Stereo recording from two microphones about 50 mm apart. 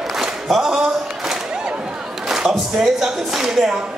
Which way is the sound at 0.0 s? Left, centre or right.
Centre.